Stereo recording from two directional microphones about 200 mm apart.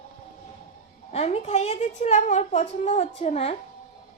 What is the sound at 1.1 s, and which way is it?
A woman's voice, 30° left (ahead or behind).